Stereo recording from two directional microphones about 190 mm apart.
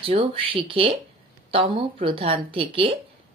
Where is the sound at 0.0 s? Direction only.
30° right (ahead or behind).